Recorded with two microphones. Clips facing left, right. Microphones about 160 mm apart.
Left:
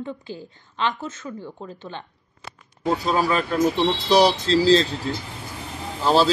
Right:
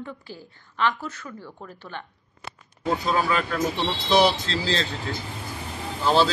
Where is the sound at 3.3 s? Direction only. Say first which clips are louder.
Left 4 dB; 35° left (ahead or behind).